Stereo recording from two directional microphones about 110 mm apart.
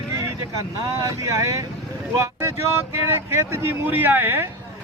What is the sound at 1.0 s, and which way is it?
Speech, 30° right (ahead or behind).